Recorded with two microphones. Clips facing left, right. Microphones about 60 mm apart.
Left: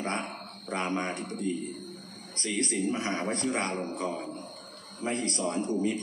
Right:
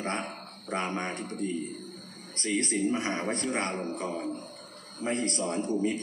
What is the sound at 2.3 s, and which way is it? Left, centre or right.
A man's voice, right.